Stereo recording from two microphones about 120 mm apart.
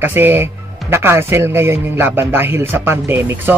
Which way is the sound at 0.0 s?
20° right (ahead or behind).